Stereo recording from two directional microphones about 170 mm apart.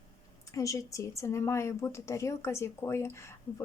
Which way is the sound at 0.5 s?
20° left (ahead or behind).